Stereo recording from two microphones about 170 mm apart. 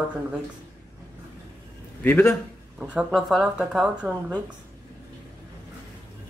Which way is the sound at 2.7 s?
5° right (ahead or behind).